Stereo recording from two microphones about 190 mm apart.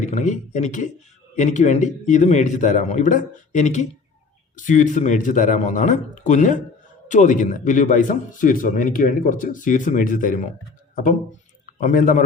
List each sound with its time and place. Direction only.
0.0 s a man's voice: 40° left (ahead or behind)
11.6 s speech: 45° left (ahead or behind)